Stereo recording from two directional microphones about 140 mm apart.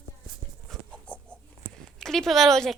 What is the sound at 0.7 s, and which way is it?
Dog, 5° left (ahead or behind).